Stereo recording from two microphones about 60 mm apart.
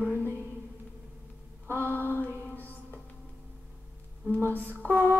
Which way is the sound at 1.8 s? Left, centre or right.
Left.